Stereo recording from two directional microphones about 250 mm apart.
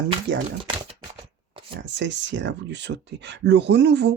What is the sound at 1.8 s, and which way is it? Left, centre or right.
Speech, right.